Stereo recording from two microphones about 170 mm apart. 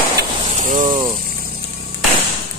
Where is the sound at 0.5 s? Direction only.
50° right (ahead or behind).